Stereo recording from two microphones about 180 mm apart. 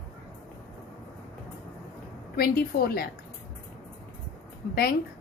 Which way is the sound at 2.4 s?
60° left (ahead or behind).